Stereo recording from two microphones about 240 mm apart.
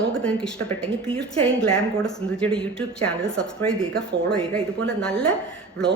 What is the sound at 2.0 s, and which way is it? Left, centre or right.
A woman's voice, centre.